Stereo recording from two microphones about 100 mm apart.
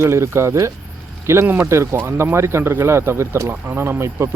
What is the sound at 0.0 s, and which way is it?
Speech, 25° right (ahead or behind).